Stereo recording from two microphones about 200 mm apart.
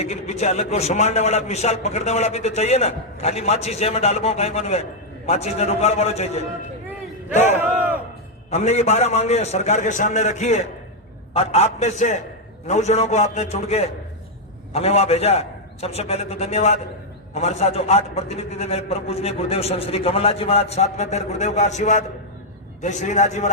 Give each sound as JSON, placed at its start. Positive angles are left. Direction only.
{"t": 0.0, "sound": "a man's voice", "side_deg": 30}
{"t": 7.6, "sound": "battle cry", "side_deg": -10}
{"t": 8.4, "sound": "a man's voice", "side_deg": 35}